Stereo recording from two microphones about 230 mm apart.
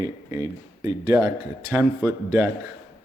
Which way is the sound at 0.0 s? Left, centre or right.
Centre.